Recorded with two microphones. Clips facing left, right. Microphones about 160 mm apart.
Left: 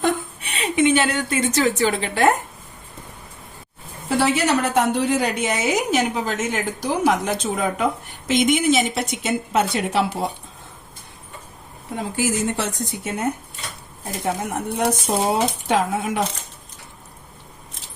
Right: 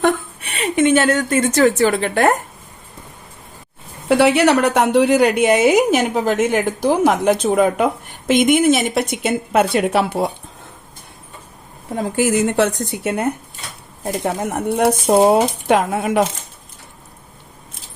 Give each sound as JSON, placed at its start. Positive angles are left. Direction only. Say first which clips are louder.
{"t": 0.8, "sound": "a woman's voice", "louder": "right 4 dB", "side_deg": -50}
{"t": 4.1, "sound": "speech", "louder": "right 6 dB", "side_deg": -70}
{"t": 5.4, "sound": "a woman's voice", "louder": "right 9 dB", "side_deg": -60}
{"t": 12.1, "sound": "a woman's voice", "louder": "right 7 dB", "side_deg": -60}
{"t": 14.3, "sound": "a woman's voice", "louder": "right 3 dB", "side_deg": -60}